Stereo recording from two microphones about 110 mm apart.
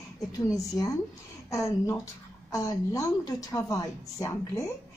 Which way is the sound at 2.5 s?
35° left (ahead or behind).